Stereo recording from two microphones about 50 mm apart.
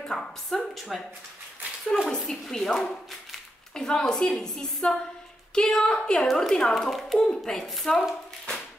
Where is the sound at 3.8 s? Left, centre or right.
Centre.